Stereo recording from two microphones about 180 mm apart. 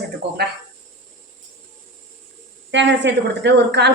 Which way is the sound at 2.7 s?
80° right.